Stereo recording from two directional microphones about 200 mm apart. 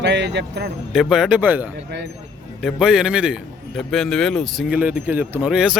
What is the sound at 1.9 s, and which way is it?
Speech, 55° right (ahead or behind).